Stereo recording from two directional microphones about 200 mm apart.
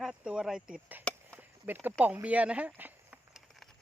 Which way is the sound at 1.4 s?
10° right (ahead or behind).